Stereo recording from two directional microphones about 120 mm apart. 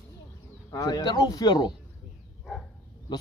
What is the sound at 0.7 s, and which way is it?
Speech, 30° left (ahead or behind).